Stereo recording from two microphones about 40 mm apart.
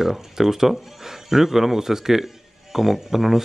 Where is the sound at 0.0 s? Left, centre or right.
Centre.